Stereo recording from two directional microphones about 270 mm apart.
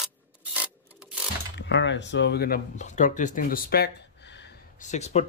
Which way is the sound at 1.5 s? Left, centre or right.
Left.